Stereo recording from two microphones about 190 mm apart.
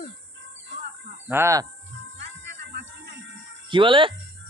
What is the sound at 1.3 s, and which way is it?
Cricket, 15° right (ahead or behind).